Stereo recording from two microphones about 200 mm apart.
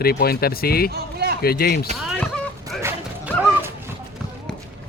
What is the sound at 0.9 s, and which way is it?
Run, 50° right (ahead or behind).